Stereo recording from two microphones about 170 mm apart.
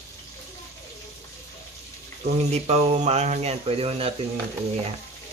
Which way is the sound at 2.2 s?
40° right (ahead or behind).